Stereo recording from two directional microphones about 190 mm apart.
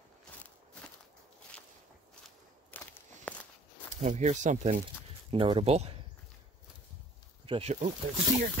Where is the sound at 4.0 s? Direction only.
40° right (ahead or behind).